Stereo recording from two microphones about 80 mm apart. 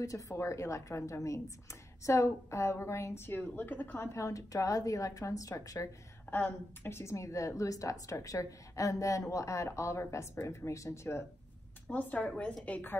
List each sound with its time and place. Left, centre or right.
0.0 s a woman's voice: left
4.1 s a woman's voice: left
6.3 s a woman's voice: left
11.9 s a woman's voice: left